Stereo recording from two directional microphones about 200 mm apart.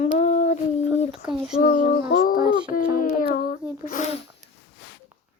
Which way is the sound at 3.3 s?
45° left (ahead or behind).